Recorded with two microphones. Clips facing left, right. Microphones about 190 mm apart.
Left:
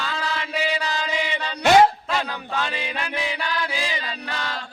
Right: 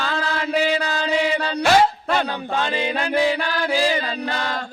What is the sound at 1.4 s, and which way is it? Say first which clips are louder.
Music: right 7 dB; 60° right (ahead or behind).